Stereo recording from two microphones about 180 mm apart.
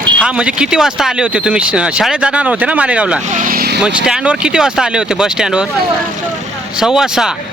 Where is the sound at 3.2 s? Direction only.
45° right (ahead or behind).